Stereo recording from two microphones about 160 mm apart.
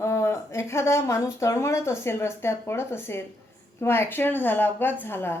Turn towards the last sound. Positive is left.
turn(degrees=15)  # may be behind; listen again after turning